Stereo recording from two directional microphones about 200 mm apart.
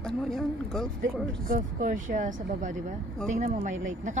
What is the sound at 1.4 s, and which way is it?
A woman's voice, 40° right (ahead or behind).